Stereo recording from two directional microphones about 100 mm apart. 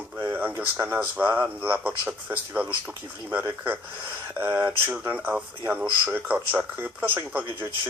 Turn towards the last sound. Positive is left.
turn(degrees=-15)  # may be behind; listen again after turning